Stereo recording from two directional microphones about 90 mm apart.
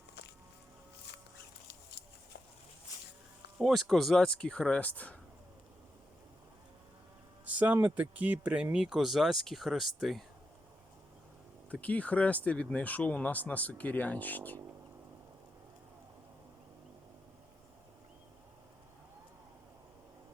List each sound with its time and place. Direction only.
3.6 s speech: centre (ahead or behind); by 5.1 s 15° left (ahead or behind)
7.4 s speech: 20° right (ahead or behind); by 10.2 s centre (ahead or behind)
11.7 s speech: 15° left (ahead or behind)